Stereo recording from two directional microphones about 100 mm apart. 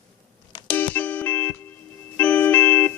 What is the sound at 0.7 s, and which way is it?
Music, 15° left (ahead or behind).